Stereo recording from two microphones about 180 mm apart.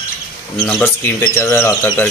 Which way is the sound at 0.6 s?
5° left (ahead or behind).